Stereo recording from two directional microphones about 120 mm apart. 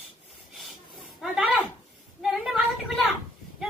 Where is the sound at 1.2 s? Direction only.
5° right (ahead or behind).